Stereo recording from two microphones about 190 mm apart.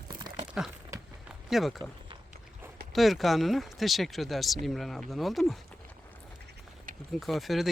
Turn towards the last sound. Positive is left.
turn(degrees=0)  # may be behind; listen again after turning